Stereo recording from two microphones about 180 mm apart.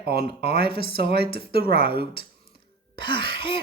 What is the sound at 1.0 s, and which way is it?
Speech, 60° right (ahead or behind).